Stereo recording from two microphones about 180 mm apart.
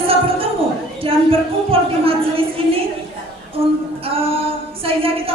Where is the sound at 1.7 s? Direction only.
30° right (ahead or behind).